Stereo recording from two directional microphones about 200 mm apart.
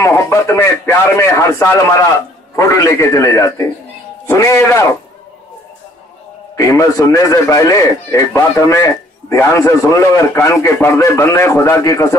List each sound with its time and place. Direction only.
0.0 s speech: 15° left (ahead or behind)
6.5 s speech: 15° left (ahead or behind)